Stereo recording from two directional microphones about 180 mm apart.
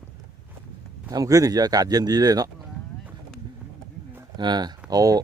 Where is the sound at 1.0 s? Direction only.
20° right (ahead or behind).